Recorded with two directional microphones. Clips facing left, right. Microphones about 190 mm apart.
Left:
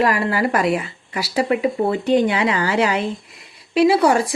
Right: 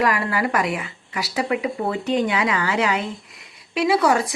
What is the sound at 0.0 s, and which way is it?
A woman's voice, 30° left (ahead or behind).